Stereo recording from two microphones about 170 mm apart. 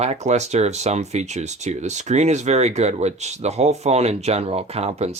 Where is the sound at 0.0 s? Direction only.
40° right (ahead or behind).